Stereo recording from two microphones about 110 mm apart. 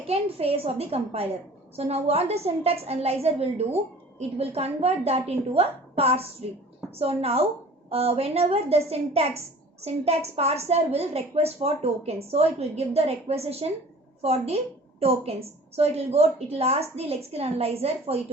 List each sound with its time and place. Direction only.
0.0 s a woman's voice: 65° right (ahead or behind)